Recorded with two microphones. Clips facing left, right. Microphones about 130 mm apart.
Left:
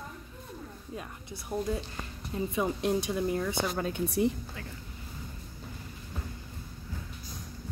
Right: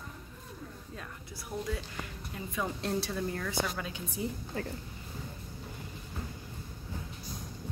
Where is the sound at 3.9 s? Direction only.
75° left (ahead or behind).